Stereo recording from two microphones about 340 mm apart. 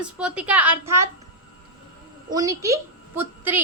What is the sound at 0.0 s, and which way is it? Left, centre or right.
A woman's voice, centre.